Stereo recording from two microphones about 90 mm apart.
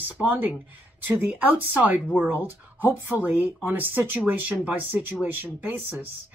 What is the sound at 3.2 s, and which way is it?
Speech, 20° right (ahead or behind).